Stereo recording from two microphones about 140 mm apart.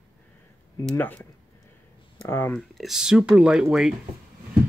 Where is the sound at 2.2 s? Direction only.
15° left (ahead or behind).